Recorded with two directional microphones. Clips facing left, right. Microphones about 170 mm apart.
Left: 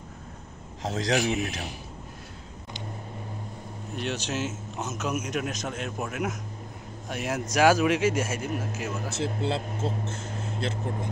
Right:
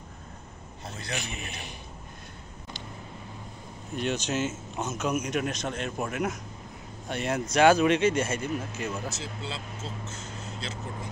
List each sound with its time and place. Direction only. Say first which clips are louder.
0.8 s a man's voice: left 11 dB; 90° left
3.9 s a man's voice: right 2 dB; centre (ahead or behind)
9.1 s speech: left 9 dB; 55° left (ahead or behind)